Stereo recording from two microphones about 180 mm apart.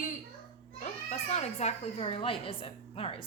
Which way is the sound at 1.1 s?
35° left (ahead or behind).